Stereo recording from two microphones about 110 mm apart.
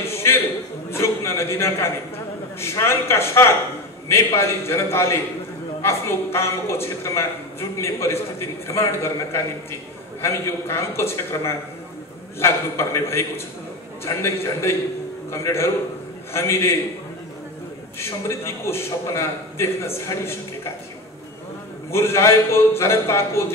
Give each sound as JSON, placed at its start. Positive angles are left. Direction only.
{"t": 0.0, "sound": "a sound", "side_deg": 25}
{"t": 0.8, "sound": "a man's voice", "side_deg": 25}
{"t": 17.9, "sound": "a man's voice", "side_deg": 25}
{"t": 21.9, "sound": "a man's voice", "side_deg": 25}